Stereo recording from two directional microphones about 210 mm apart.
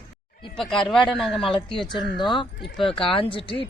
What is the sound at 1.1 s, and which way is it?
Speech, centre (ahead or behind).